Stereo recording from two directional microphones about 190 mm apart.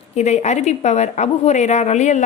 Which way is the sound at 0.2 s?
35° left (ahead or behind).